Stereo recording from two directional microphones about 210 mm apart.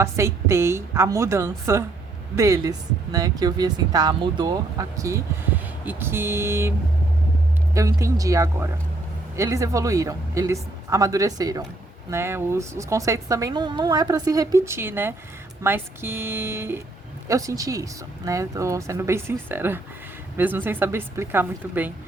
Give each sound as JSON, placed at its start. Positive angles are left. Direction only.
{"t": 0.0, "sound": "a woman's voice", "side_deg": -15}